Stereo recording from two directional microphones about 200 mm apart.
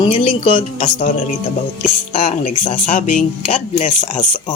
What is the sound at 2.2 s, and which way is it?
Speech, 35° left (ahead or behind).